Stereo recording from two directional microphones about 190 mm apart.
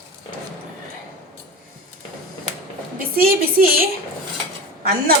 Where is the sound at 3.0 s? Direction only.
50° right (ahead or behind).